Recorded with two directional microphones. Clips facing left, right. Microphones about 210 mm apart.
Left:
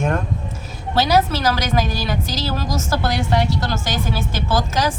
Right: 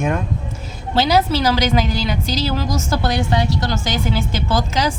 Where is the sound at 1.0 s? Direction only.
15° right (ahead or behind).